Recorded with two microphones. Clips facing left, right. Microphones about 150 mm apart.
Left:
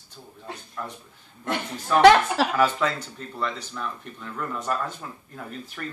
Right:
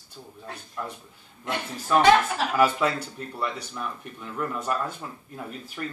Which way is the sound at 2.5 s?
10° right (ahead or behind).